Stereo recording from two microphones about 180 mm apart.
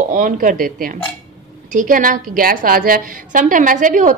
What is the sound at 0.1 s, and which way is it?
A woman's voice, 50° right (ahead or behind).